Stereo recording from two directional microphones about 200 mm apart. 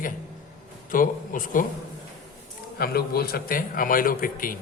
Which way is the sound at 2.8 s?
50° left (ahead or behind).